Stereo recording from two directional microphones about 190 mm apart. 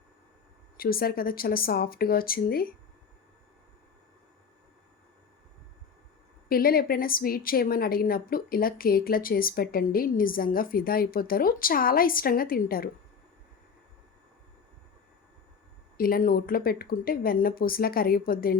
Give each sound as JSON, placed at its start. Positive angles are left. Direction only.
{"t": 0.8, "sound": "a woman's voice", "side_deg": 50}
{"t": 6.5, "sound": "a woman's voice", "side_deg": 50}
{"t": 16.0, "sound": "a woman's voice", "side_deg": 50}